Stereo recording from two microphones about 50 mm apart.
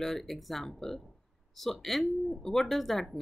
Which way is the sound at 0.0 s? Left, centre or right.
Centre.